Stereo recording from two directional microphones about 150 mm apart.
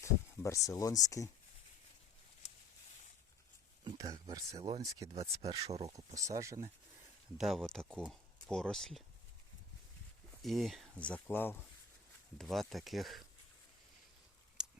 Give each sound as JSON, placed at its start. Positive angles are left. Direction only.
{"t": 0.0, "sound": "speech", "side_deg": 20}
{"t": 3.8, "sound": "speech", "side_deg": -25}
{"t": 5.2, "sound": "speech", "side_deg": -45}
{"t": 6.0, "sound": "speech", "side_deg": -20}
{"t": 7.3, "sound": "speech", "side_deg": 0}
{"t": 10.4, "sound": "speech", "side_deg": 0}
{"t": 12.4, "sound": "speech", "side_deg": 0}
{"t": 14.6, "sound": "a sound", "side_deg": -5}